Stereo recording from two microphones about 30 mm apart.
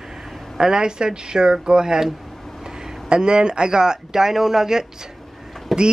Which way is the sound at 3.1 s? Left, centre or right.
Right.